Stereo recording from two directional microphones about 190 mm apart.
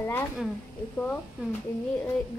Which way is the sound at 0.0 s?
10° left (ahead or behind).